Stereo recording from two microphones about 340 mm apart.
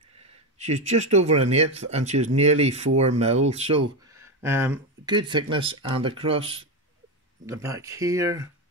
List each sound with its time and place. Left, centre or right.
0.2 s speech: centre